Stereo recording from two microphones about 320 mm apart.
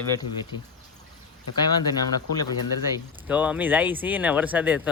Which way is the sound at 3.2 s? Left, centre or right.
Centre.